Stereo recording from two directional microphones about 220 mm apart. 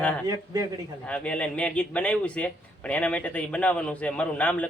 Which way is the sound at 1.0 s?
5° left (ahead or behind).